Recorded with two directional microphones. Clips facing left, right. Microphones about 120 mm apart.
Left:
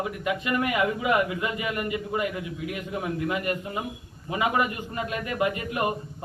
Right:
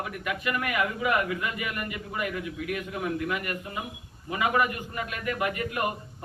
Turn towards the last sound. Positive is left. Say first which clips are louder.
# left 3 dB
turn(degrees=25)  # may be behind; listen again after turning